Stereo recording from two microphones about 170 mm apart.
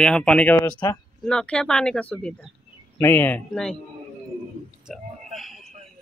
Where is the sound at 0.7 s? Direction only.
25° left (ahead or behind).